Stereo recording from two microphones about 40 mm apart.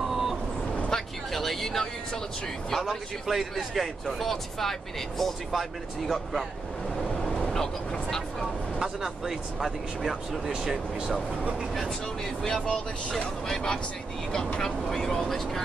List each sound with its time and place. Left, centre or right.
0.1 s vehicle: centre
0.8 s vehicle: centre
2.7 s speech: centre
7.0 s vehicle: centre
7.4 s speech: centre
8.7 s speech: centre
12.4 s speech: centre